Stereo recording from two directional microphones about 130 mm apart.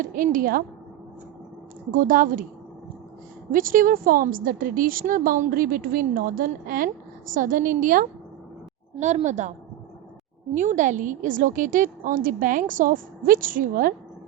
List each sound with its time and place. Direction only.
0.0 s a woman's voice: 90° right
1.9 s a woman's voice: 90° right
3.5 s a woman's voice: 90° right
9.0 s a woman's voice: 65° right (ahead or behind)
10.5 s a woman's voice: 75° right (ahead or behind); by 13.9 s 90° right